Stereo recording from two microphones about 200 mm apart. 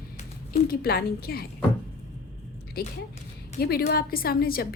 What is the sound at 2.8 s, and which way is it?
A woman's voice, 50° left (ahead or behind).